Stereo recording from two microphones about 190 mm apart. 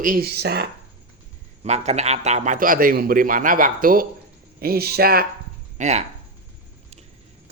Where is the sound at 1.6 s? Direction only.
35° right (ahead or behind); by 5.3 s 55° right (ahead or behind).